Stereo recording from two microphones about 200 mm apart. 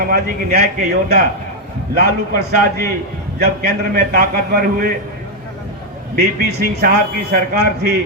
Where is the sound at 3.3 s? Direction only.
50° right (ahead or behind).